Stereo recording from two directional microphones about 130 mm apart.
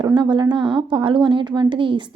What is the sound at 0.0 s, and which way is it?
A woman's voice, 35° right (ahead or behind).